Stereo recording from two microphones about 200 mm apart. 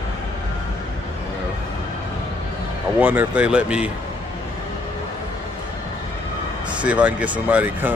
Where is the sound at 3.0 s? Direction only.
10° right (ahead or behind).